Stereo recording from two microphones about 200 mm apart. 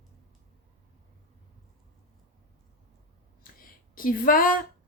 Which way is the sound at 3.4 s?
45° left (ahead or behind).